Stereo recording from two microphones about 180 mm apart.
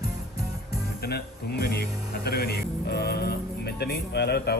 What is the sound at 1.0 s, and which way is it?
Speech, 60° left (ahead or behind).